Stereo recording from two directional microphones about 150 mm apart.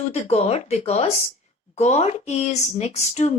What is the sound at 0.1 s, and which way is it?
Speech, 45° left (ahead or behind).